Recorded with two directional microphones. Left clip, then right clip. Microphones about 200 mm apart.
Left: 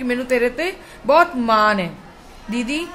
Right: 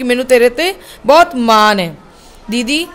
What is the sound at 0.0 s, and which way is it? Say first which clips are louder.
A woman's voice: right 9 dB; 45° right (ahead or behind).